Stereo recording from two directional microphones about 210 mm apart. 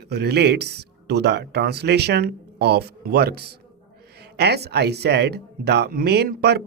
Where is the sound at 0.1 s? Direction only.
50° right (ahead or behind).